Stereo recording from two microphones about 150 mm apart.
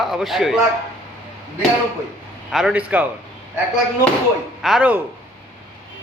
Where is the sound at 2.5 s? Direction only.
Centre (ahead or behind).